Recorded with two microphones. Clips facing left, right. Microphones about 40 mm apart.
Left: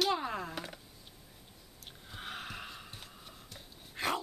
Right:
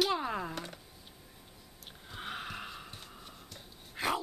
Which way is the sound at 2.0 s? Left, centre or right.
Centre.